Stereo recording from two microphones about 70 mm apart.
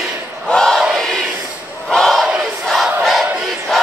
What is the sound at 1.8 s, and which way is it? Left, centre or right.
Battle cry, centre.